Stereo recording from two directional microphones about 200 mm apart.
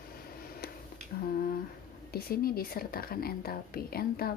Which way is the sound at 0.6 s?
50° left (ahead or behind).